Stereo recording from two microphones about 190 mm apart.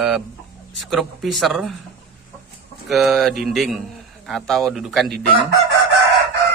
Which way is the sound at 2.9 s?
Centre (ahead or behind).